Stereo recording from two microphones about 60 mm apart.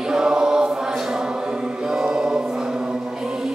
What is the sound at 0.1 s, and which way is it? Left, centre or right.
Chant, centre.